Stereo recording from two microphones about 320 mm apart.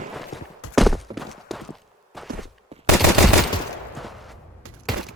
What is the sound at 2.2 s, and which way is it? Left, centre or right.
Walk, centre.